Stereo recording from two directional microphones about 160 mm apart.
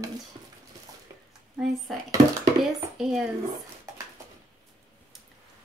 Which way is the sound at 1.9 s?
Centre (ahead or behind).